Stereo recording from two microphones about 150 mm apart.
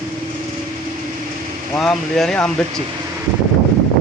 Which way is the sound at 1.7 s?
5° left (ahead or behind).